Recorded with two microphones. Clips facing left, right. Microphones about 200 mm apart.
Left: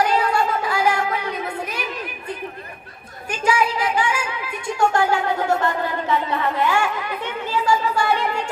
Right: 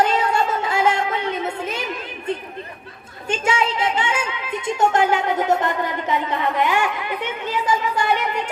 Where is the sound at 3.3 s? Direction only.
25° right (ahead or behind).